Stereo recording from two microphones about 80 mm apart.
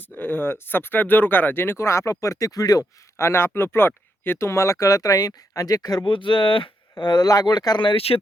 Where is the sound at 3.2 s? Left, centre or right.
Left.